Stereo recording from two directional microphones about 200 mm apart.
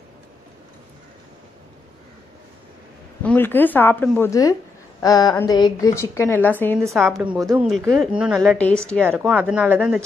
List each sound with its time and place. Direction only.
3.2 s a woman's voice: 10° left (ahead or behind)
5.0 s a sound: 20° left (ahead or behind)
5.5 s a woman's voice: 20° left (ahead or behind)
9.0 s speech: 10° right (ahead or behind)